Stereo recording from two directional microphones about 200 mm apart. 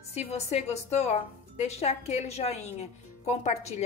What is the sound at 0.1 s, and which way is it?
A woman's voice, 35° left (ahead or behind).